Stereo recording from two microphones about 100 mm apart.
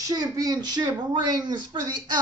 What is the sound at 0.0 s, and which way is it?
Speech, 35° right (ahead or behind).